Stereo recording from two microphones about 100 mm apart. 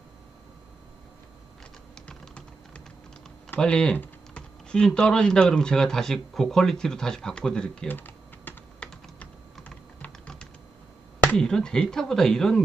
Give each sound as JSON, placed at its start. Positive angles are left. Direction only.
{"t": 2.0, "sound": "typing", "side_deg": 10}
{"t": 3.6, "sound": "speech", "side_deg": 10}
{"t": 3.9, "sound": "typing", "side_deg": 20}
{"t": 4.7, "sound": "speech", "side_deg": 5}
{"t": 7.9, "sound": "typing", "side_deg": 20}
{"t": 11.3, "sound": "speech", "side_deg": 5}